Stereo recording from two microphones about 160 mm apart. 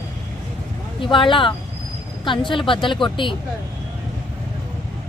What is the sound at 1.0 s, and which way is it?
Speech, 30° left (ahead or behind).